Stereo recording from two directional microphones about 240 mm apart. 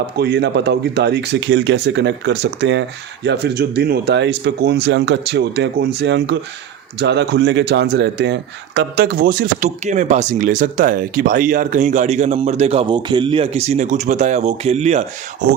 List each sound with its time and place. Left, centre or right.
0.2 s speech: right